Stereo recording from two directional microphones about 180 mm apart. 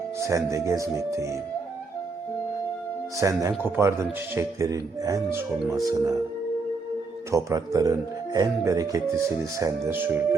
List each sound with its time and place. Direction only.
0.2 s speech: 15° right (ahead or behind)
3.2 s speech: 15° right (ahead or behind)
7.3 s speech: 20° right (ahead or behind)